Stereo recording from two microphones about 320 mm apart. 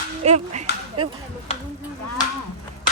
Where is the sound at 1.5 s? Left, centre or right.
Centre.